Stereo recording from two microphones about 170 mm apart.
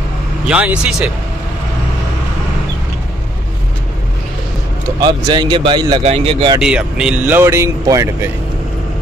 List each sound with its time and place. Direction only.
0.5 s speech: 5° right (ahead or behind)
5.0 s speech: 25° right (ahead or behind)
6.6 s speech: 5° right (ahead or behind)